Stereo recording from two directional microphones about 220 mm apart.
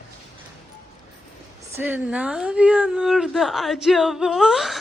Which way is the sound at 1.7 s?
5° right (ahead or behind).